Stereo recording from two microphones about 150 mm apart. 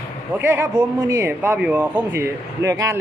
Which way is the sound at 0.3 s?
15° right (ahead or behind).